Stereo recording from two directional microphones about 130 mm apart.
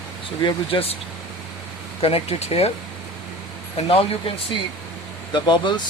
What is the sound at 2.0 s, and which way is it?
Speech, 45° left (ahead or behind).